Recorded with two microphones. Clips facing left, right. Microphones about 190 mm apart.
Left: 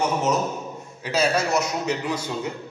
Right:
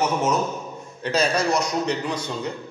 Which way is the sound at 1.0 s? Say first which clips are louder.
Right 1 dB; 5° left (ahead or behind).